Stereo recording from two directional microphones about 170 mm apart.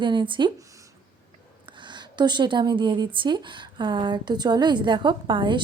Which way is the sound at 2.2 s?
25° right (ahead or behind).